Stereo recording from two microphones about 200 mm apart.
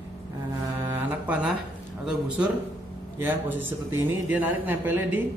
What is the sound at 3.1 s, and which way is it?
Speech, 10° right (ahead or behind).